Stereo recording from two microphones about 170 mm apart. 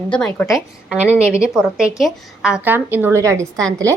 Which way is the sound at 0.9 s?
10° right (ahead or behind).